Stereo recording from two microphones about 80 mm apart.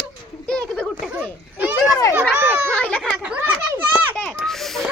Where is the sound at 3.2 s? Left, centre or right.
Right.